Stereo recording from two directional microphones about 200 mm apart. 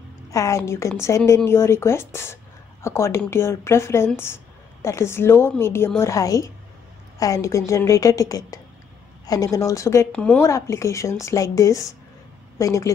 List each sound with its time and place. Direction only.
0.3 s a woman's voice: 15° left (ahead or behind)